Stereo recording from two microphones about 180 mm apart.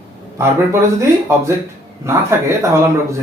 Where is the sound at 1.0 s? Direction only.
15° right (ahead or behind).